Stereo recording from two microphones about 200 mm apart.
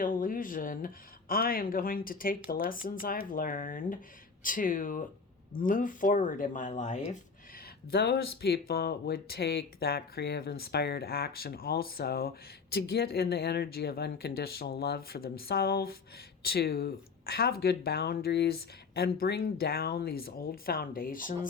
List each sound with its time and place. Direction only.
0.0 s speech: 45° left (ahead or behind)
7.9 s speech: 55° left (ahead or behind)